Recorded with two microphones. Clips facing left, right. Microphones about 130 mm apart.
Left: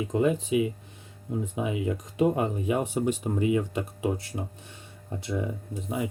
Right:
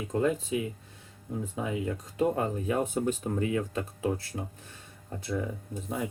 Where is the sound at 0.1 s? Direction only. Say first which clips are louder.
Left 2 dB; 15° left (ahead or behind).